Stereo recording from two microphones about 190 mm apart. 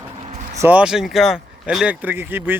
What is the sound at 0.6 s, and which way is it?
Speech, 5° right (ahead or behind).